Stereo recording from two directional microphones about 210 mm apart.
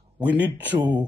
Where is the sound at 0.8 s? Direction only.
20° right (ahead or behind).